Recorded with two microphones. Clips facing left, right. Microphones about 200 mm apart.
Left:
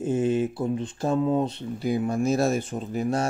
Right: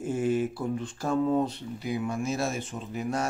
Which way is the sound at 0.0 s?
25° left (ahead or behind).